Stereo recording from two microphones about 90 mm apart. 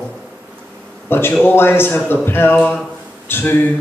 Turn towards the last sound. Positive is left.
turn(degrees=25)  # may be behind; listen again after turning